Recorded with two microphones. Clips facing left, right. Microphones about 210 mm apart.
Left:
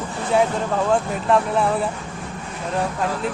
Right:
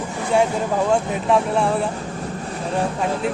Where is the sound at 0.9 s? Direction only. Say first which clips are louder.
Left 1 dB; centre (ahead or behind).